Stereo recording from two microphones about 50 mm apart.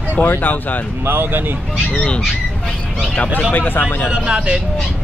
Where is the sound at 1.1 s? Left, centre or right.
Right.